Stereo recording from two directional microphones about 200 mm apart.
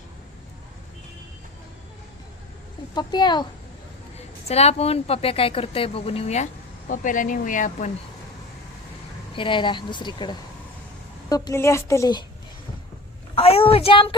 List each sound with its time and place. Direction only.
2.9 s a woman's voice: 20° left (ahead or behind)
4.4 s speech: 30° left (ahead or behind)
9.3 s a woman's voice: 25° left (ahead or behind)
13.3 s a woman's voice: 30° left (ahead or behind)